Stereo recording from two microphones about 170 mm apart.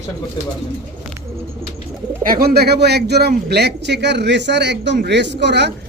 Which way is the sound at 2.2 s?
60° right (ahead or behind).